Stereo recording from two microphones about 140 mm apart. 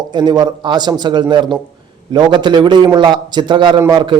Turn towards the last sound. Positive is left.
turn(degrees=-35)  # may be behind; listen again after turning